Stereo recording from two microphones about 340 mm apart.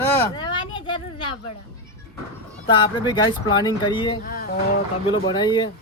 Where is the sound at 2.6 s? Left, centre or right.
Centre.